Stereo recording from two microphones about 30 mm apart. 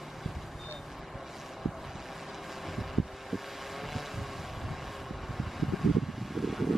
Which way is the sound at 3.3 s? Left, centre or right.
Centre.